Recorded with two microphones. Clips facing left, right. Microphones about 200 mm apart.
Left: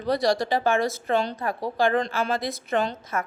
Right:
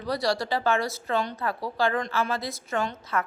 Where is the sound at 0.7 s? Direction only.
50° left (ahead or behind).